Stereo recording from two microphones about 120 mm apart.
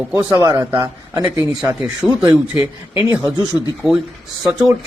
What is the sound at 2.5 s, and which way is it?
Speech, 15° right (ahead or behind).